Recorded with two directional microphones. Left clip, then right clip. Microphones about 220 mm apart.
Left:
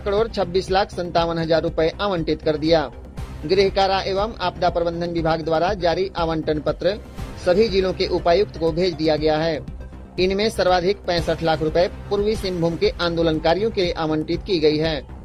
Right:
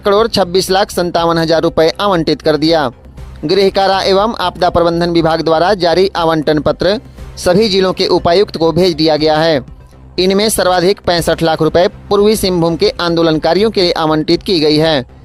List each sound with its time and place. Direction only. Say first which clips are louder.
0.0 s speech: right 10 dB; 35° right (ahead or behind)